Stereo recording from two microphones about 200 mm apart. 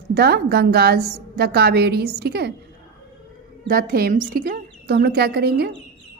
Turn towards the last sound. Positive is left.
turn(degrees=-50)  # may be behind; listen again after turning